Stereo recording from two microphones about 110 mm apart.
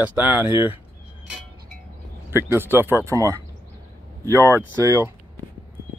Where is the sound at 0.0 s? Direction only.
15° right (ahead or behind).